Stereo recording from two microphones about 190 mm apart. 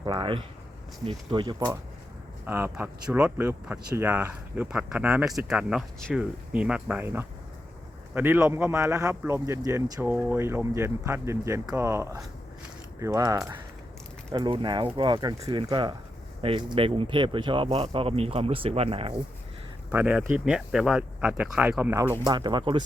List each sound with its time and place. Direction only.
0.0 s speech: 25° right (ahead or behind)
19.9 s speech: 10° right (ahead or behind); by 22.8 s 25° right (ahead or behind)